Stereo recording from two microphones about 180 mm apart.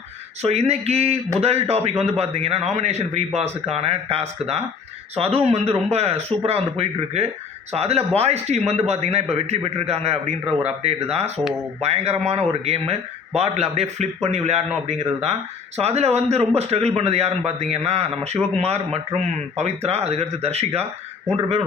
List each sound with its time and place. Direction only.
0.4 s a man's voice: 35° right (ahead or behind)